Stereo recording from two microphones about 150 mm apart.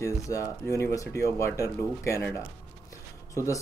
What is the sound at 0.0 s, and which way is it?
Speech, 20° left (ahead or behind).